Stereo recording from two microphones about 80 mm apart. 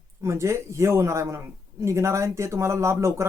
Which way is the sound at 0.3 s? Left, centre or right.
Right.